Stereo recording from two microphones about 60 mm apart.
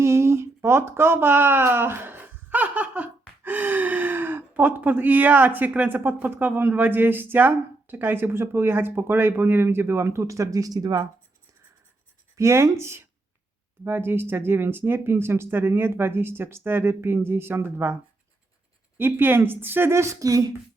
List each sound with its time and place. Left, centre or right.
0.0 s a sound: right
3.4 s speech: right
12.4 s speech: right
13.8 s speech: right
18.9 s speech: right